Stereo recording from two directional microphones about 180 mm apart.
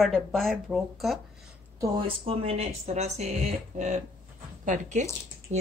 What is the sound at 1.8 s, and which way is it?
Speech, 30° right (ahead or behind).